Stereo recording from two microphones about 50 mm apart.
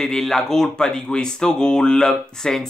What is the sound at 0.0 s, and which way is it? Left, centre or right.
Speech, centre.